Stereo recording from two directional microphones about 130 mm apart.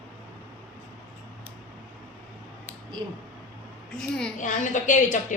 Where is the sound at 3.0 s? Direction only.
40° right (ahead or behind).